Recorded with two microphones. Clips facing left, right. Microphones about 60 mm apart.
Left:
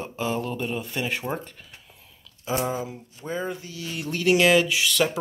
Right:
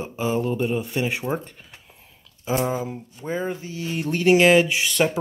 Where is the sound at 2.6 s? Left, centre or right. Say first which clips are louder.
Right 3 dB; right.